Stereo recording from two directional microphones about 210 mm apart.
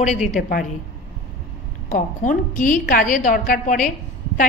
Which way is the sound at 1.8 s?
40° left (ahead or behind).